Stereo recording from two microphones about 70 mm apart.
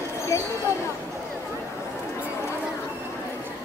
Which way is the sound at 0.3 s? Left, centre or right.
Left.